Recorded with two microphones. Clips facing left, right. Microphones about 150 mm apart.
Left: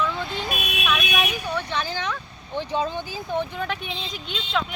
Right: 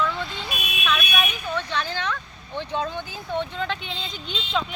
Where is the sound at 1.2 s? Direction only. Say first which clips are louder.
Left 1 dB; 10° left (ahead or behind).